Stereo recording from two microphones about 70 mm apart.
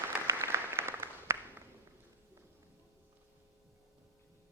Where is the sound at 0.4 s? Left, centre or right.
Right.